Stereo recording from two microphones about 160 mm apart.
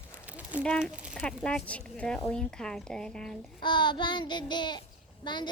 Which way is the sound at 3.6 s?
30° left (ahead or behind).